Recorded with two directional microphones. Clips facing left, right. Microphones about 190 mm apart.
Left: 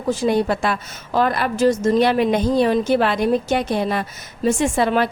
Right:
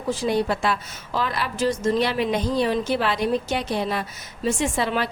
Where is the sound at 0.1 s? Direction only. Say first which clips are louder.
Left 4 dB; 50° left (ahead or behind).